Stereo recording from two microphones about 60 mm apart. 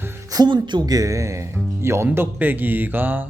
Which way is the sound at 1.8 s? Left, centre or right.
Right.